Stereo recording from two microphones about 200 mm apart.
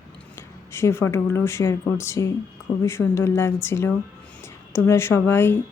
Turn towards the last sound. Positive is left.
turn(degrees=10)  # may be behind; listen again after turning